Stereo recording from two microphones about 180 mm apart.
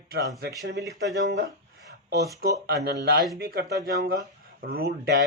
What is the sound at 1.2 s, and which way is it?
Speech, 75° right (ahead or behind).